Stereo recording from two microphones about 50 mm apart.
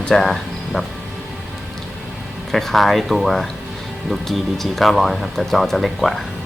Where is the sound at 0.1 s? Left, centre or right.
Centre.